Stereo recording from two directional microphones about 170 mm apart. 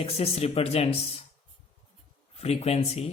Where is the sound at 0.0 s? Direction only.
35° left (ahead or behind).